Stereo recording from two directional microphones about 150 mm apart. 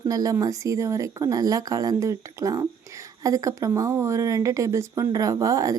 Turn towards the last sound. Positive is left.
turn(degrees=-25)  # may be behind; listen again after turning